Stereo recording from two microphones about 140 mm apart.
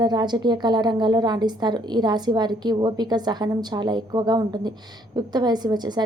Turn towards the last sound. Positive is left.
turn(degrees=-30)  # may be behind; listen again after turning